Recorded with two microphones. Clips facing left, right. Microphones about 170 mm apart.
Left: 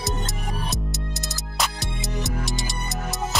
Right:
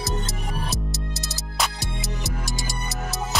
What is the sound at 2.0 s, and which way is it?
Music, 20° left (ahead or behind).